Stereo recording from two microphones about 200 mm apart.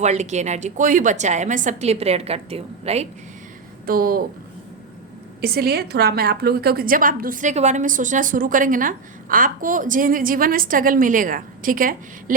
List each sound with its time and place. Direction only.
0.0 s a woman's voice: 35° right (ahead or behind)
3.8 s a woman's voice: 45° right (ahead or behind)
5.4 s a woman's voice: 50° right (ahead or behind)